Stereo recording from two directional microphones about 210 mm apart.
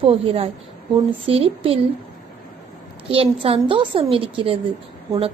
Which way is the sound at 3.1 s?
25° right (ahead or behind).